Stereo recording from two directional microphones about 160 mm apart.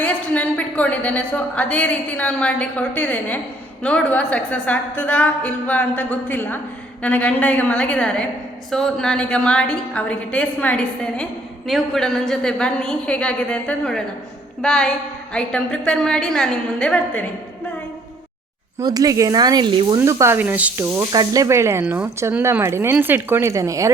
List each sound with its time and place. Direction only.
0.0 s a woman's voice: 10° left (ahead or behind)
18.8 s speech: 25° right (ahead or behind)
20.0 s speech: 15° right (ahead or behind)
21.1 s speech: 20° right (ahead or behind)